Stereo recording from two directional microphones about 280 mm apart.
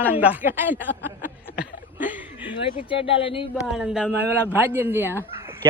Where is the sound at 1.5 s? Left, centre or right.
Centre.